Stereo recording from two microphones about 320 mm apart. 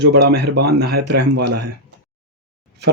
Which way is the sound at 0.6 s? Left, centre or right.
Right.